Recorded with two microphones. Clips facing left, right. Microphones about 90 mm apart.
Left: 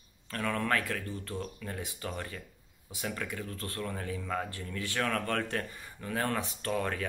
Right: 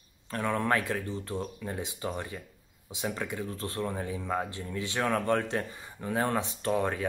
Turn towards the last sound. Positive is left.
turn(degrees=-20)  # may be behind; listen again after turning